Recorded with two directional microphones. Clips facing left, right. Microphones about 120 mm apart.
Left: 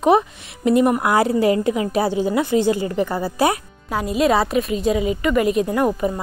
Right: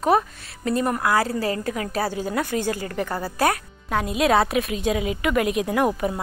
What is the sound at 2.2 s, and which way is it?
Speech, 5° left (ahead or behind).